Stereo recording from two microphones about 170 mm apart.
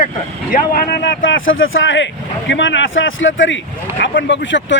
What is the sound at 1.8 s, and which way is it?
Speech, 90° left.